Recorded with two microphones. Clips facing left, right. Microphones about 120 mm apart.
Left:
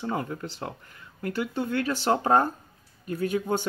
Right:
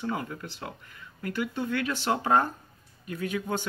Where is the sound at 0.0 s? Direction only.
30° left (ahead or behind).